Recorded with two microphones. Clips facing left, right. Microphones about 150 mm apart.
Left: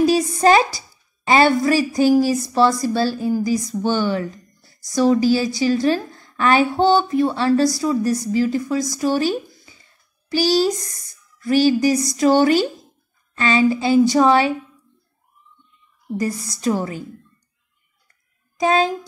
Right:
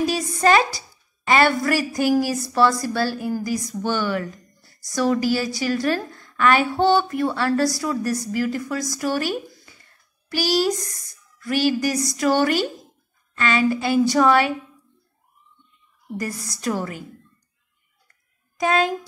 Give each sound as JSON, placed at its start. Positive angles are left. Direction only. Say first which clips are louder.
{"t": 0.1, "sound": "a woman's voice", "louder": "left 4 dB", "side_deg": 30}
{"t": 10.3, "sound": "a woman's voice", "louder": "left 4 dB", "side_deg": 25}
{"t": 16.6, "sound": "a woman's voice", "louder": "left 4 dB", "side_deg": 25}
{"t": 18.6, "sound": "a woman's voice", "louder": "left 3 dB", "side_deg": 30}